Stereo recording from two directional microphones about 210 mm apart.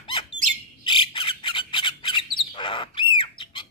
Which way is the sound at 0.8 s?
25° left (ahead or behind).